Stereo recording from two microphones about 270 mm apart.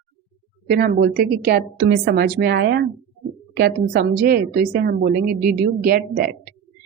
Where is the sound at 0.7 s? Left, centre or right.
Right.